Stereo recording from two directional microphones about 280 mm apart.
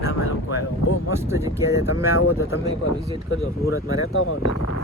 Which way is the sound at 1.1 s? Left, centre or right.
Centre.